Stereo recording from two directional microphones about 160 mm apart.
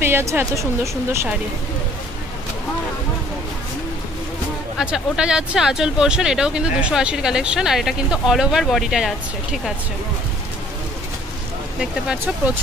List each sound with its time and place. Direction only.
0.0 s a woman's voice: 15° right (ahead or behind)
4.7 s speech: 5° right (ahead or behind)
11.8 s speech: 5° right (ahead or behind)